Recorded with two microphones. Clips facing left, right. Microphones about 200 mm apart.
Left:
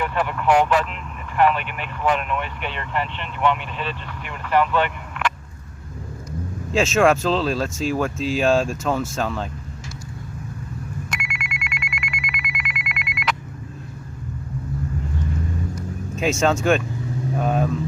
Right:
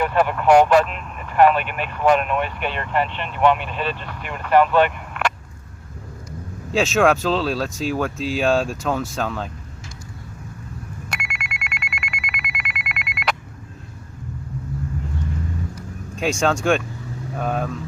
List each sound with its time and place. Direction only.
0.0 s speech: 45° right (ahead or behind)
6.7 s speech: centre (ahead or behind)
11.1 s telephone: 40° right (ahead or behind)
12.9 s telephone bell ringing: 40° right (ahead or behind)
16.1 s speech: centre (ahead or behind)